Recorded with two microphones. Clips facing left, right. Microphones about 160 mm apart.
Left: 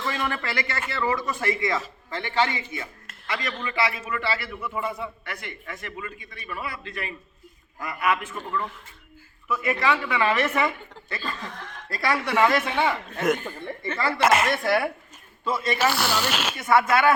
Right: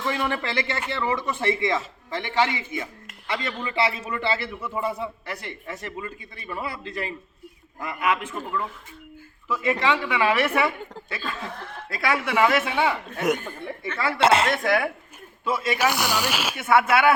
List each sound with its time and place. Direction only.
0.0 s speech: 10° right (ahead or behind)
0.5 s a man's voice: 25° right (ahead or behind)
2.7 s a sound: 15° right (ahead or behind)
3.5 s speech: 10° right (ahead or behind)
3.8 s a man's voice: 25° right (ahead or behind)
8.4 s speech: 5° right (ahead or behind)
9.6 s speech: 20° right (ahead or behind)
14.2 s a man's voice: 30° right (ahead or behind)
14.5 s speech: centre (ahead or behind)